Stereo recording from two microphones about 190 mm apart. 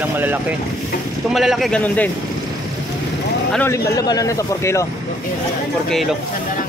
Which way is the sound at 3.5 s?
15° left (ahead or behind).